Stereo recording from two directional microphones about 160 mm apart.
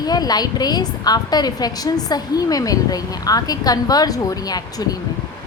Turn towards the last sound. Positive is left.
turn(degrees=25)  # may be behind; listen again after turning